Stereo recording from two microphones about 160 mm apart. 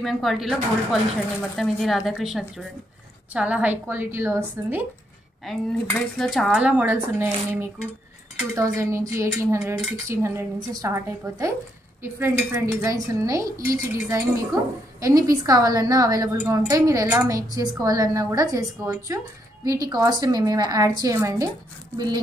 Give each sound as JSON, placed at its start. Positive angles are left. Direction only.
{"t": 0.0, "sound": "cutlery", "side_deg": 0}
{"t": 1.6, "sound": "cutlery", "side_deg": 0}
{"t": 3.3, "sound": "speech", "side_deg": -10}
{"t": 5.4, "sound": "cutlery", "side_deg": 5}
{"t": 8.5, "sound": "a woman's voice", "side_deg": -20}